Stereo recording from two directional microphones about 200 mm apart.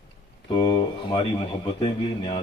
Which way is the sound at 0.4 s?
25° left (ahead or behind).